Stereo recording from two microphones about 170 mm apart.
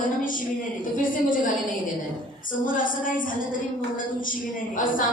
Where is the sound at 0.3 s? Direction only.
50° left (ahead or behind).